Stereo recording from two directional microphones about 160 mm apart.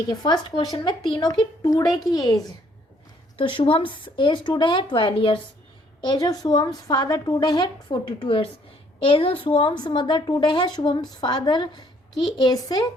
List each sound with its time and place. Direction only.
0.1 s a woman's voice: 25° left (ahead or behind)